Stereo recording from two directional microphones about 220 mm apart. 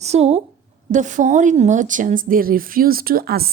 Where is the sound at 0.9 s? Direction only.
35° right (ahead or behind).